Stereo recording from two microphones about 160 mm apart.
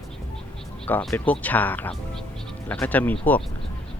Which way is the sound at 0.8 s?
10° left (ahead or behind).